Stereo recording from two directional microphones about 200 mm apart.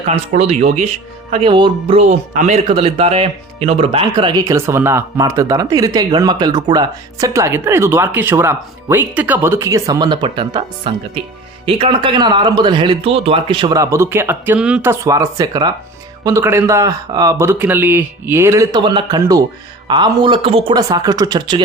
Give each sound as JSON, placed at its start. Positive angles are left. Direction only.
{"t": 0.3, "sound": "speech", "side_deg": -35}